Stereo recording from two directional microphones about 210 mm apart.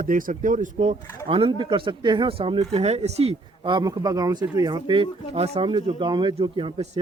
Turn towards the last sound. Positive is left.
turn(degrees=-25)  # may be behind; listen again after turning